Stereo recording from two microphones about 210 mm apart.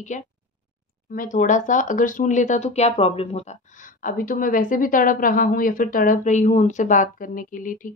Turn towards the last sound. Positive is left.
turn(degrees=40)  # may be behind; listen again after turning